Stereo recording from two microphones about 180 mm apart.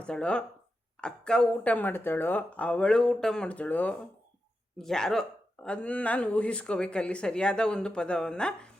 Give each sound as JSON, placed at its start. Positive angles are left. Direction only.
{"t": 0.0, "sound": "speech", "side_deg": 5}